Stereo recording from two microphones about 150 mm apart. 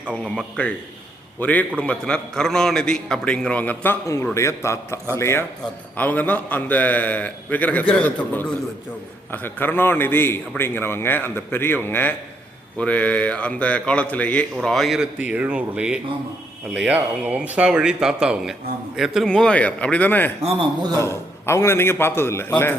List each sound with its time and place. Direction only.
0.2 s a man's voice: 5° left (ahead or behind)
20.4 s speech: 30° right (ahead or behind)
21.0 s a man's voice: 20° left (ahead or behind)